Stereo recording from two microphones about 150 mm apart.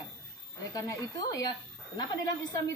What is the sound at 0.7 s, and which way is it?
A woman's voice, 20° left (ahead or behind).